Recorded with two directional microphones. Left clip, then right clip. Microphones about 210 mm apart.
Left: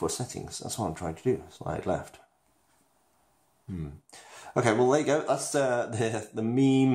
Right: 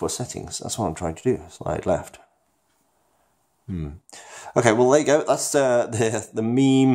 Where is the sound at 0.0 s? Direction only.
35° right (ahead or behind).